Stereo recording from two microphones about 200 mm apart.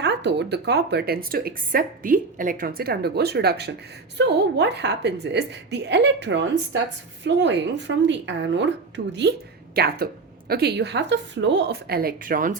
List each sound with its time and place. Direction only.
0.0 s a woman's voice: 60° right (ahead or behind)